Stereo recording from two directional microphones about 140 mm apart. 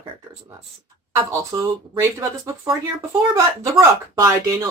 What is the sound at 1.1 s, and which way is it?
Speech, 20° right (ahead or behind).